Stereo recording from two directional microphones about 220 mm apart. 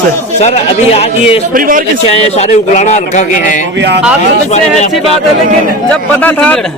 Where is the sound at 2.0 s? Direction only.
30° left (ahead or behind).